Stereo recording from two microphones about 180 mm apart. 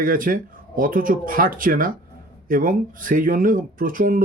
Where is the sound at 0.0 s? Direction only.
50° right (ahead or behind).